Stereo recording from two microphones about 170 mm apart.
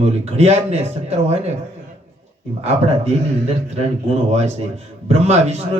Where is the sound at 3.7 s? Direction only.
40° right (ahead or behind).